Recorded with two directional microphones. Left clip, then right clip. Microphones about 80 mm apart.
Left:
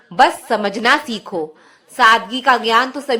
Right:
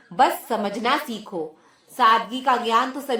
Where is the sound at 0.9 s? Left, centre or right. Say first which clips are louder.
Left 8 dB; left.